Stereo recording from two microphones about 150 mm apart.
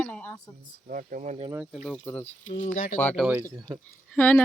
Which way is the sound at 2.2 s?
50° left (ahead or behind).